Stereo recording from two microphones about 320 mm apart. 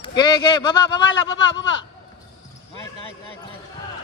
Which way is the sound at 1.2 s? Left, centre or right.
Left.